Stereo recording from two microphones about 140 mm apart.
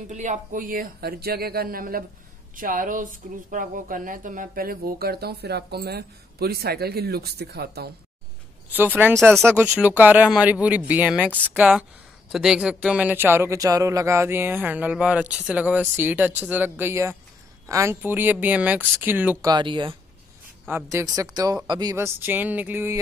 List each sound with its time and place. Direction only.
0.1 s speech: 60° right (ahead or behind); by 2.0 s 90° right
2.5 s speech: 75° right (ahead or behind)
6.4 s speech: 90° right
8.7 s speech: 15° right (ahead or behind)
9.1 s speech: centre (ahead or behind)
19.4 s speech: 35° right (ahead or behind)
20.6 s speech: 20° right (ahead or behind)
21.9 s speech: 15° right (ahead or behind)